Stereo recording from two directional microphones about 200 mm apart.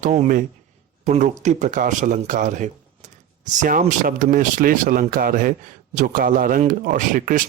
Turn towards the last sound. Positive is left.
turn(degrees=-40)  # may be behind; listen again after turning